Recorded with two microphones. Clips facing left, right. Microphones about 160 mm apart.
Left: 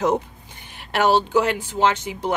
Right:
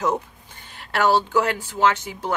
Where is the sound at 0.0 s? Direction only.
20° left (ahead or behind).